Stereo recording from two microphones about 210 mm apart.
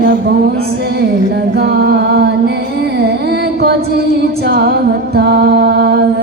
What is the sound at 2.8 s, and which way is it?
Music, 50° right (ahead or behind).